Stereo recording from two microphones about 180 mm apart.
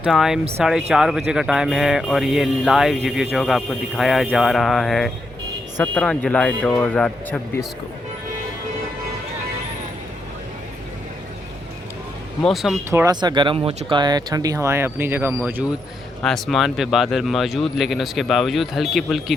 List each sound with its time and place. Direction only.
0.0 s speech: 5° right (ahead or behind)
5.7 s speech: 10° left (ahead or behind)
12.4 s speech: centre (ahead or behind)
12.9 s speech: 20° right (ahead or behind)
16.2 s speech: centre (ahead or behind)